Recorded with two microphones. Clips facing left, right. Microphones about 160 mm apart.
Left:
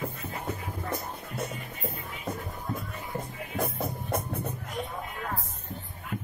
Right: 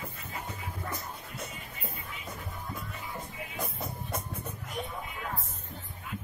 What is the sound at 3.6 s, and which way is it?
Music, 55° left (ahead or behind).